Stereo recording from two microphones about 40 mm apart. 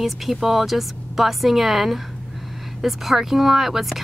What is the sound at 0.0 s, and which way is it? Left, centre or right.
A woman's voice, centre.